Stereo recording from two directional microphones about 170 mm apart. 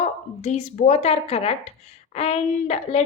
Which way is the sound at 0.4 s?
40° left (ahead or behind).